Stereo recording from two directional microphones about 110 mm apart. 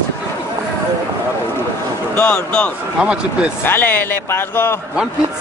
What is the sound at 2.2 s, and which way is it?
Speech, 15° left (ahead or behind).